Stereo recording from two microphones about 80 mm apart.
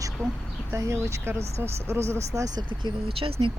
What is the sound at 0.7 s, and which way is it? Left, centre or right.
Speech, right.